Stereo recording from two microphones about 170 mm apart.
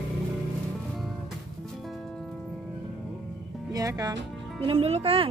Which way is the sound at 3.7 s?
20° right (ahead or behind).